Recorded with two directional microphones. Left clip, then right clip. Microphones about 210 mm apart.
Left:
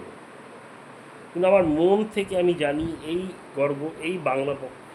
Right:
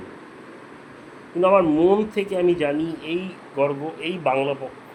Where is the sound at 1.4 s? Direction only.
10° left (ahead or behind).